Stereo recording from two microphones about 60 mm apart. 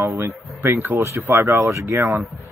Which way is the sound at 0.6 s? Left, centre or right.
Right.